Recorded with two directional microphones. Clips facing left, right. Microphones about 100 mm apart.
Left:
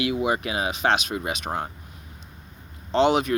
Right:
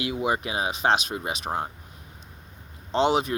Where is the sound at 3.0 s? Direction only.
30° right (ahead or behind).